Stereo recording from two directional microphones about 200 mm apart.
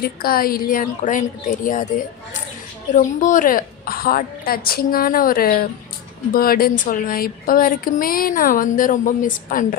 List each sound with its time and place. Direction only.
0.0 s speech: 50° left (ahead or behind)
2.9 s speech: 40° left (ahead or behind)